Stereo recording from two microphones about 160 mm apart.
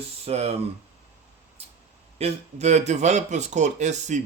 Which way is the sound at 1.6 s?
40° right (ahead or behind).